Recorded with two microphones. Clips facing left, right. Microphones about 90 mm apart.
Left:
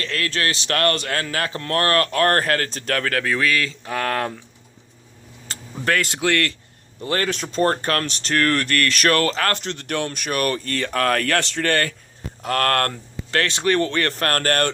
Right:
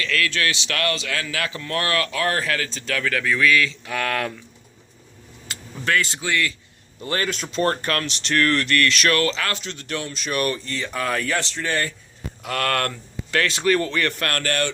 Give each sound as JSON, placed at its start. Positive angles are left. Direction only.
{"t": 0.0, "sound": "speech", "side_deg": 35}
{"t": 5.5, "sound": "speech", "side_deg": 40}
{"t": 7.0, "sound": "speech", "side_deg": 45}
{"t": 12.4, "sound": "speech", "side_deg": 45}